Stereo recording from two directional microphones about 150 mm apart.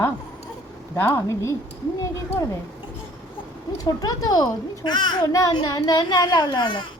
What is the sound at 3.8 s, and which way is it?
A child's voice, 25° left (ahead or behind).